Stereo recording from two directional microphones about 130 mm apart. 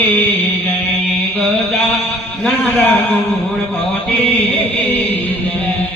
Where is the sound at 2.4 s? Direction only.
Centre (ahead or behind).